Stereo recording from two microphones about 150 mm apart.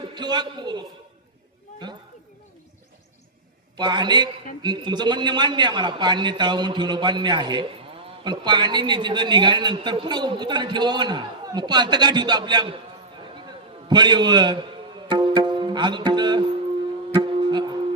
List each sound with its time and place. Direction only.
0.1 s a man's voice: 30° right (ahead or behind)
3.8 s a man's voice: 30° right (ahead or behind)
13.8 s a man's voice: 30° right (ahead or behind)
15.1 s music: 30° right (ahead or behind)